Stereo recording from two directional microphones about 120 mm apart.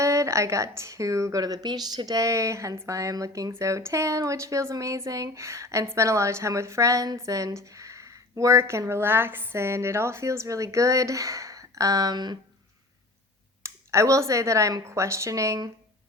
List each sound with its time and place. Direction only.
0.0 s speech: 25° right (ahead or behind)
13.6 s speech: 25° right (ahead or behind)